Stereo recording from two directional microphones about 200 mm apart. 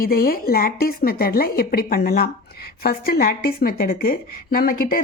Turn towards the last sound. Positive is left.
turn(degrees=45)  # may be behind; listen again after turning